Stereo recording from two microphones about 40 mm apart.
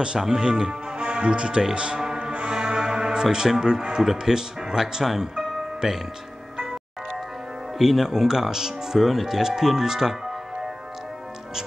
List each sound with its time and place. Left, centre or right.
0.0 s speech: right
2.2 s music: centre
4.0 s speech: centre
7.8 s speech: centre